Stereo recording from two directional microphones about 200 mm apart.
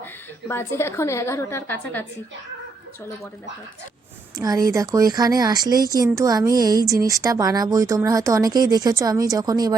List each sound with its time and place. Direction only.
0.0 s a woman's voice: 10° left (ahead or behind)
4.4 s speech: 15° right (ahead or behind)